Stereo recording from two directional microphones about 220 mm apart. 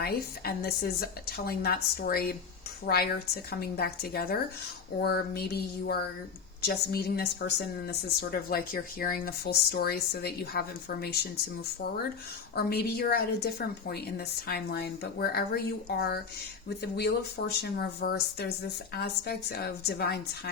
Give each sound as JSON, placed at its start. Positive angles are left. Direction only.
{"t": 0.0, "sound": "speech", "side_deg": 45}